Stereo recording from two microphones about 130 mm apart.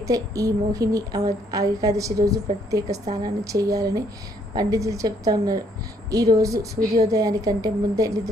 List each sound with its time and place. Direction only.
0.0 s speech: 25° right (ahead or behind)